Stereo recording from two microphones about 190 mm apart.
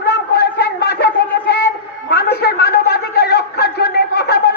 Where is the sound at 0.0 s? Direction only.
55° left (ahead or behind).